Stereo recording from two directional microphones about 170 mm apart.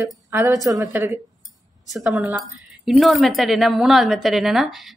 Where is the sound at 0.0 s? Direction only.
15° right (ahead or behind).